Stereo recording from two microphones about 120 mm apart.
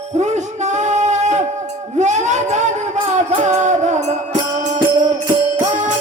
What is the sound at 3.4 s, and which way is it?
Music, 80° right.